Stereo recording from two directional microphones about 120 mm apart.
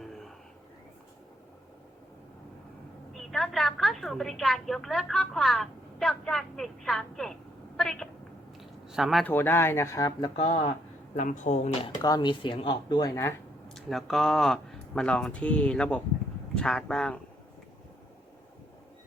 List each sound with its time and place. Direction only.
3.2 s a woman's voice: centre (ahead or behind)
9.2 s speech: 20° left (ahead or behind)
10.2 s speech: 60° left (ahead or behind)
11.1 s speech: 90° left; by 11.9 s 70° left (ahead or behind)
12.0 s speech: 35° left (ahead or behind)
13.7 s speech: 5° left (ahead or behind)